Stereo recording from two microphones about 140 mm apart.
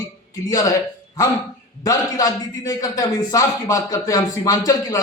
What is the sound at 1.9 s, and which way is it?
A man's voice, 25° left (ahead or behind).